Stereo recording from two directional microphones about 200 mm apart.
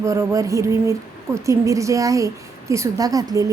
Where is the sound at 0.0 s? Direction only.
15° right (ahead or behind).